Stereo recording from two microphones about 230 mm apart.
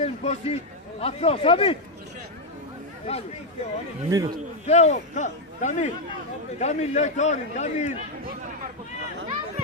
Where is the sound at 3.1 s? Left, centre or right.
Left.